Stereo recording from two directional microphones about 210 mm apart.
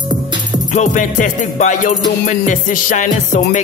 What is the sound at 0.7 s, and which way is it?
Music, 35° left (ahead or behind).